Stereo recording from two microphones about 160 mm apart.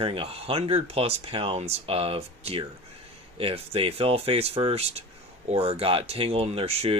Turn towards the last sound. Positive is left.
turn(degrees=-40)  # may be behind; listen again after turning